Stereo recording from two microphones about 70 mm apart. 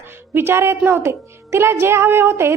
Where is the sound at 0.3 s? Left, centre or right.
Right.